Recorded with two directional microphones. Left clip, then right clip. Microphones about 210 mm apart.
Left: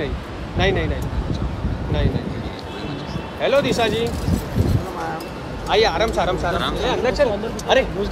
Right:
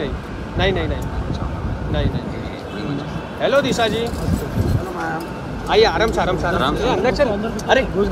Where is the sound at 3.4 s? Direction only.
35° left (ahead or behind).